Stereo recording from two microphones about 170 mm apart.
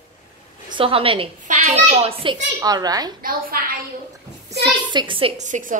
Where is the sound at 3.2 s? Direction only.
55° right (ahead or behind).